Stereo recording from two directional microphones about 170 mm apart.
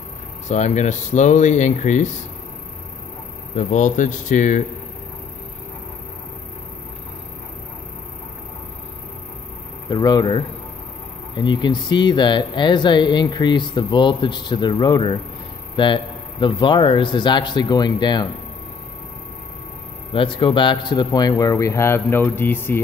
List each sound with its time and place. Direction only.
0.5 s speech: 45° left (ahead or behind)
3.5 s speech: 45° left (ahead or behind)
9.8 s speech: 25° left (ahead or behind)
20.1 s speech: 30° left (ahead or behind); by 22.8 s 10° left (ahead or behind)